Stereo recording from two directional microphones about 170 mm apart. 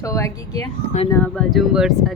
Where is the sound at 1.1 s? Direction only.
10° left (ahead or behind).